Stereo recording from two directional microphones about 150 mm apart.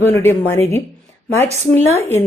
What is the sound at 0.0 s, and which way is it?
Speech, 15° left (ahead or behind).